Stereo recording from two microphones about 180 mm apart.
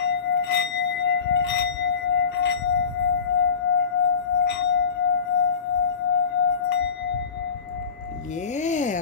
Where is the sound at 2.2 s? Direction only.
75° left (ahead or behind).